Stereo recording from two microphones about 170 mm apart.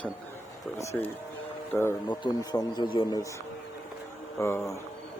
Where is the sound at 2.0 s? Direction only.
25° left (ahead or behind).